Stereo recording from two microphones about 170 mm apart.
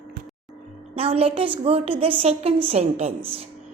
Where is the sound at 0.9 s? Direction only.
35° right (ahead or behind).